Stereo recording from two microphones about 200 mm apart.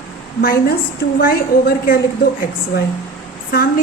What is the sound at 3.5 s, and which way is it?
Speech, 50° left (ahead or behind).